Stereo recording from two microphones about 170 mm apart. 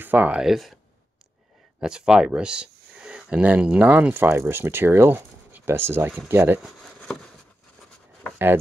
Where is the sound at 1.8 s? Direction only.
5° right (ahead or behind).